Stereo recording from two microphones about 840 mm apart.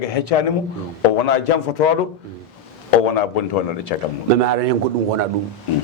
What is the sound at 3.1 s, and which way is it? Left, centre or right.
Speech, left.